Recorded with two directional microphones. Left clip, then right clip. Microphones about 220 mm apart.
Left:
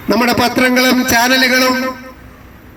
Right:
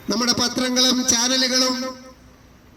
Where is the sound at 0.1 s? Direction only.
45° right (ahead or behind).